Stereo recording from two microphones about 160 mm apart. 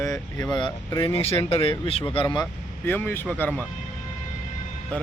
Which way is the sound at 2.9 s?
10° left (ahead or behind).